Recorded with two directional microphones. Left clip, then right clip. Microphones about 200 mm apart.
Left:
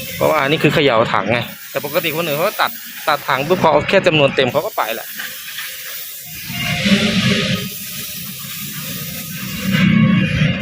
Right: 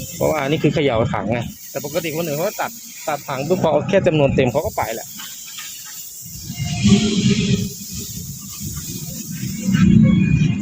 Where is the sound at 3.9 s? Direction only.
15° right (ahead or behind).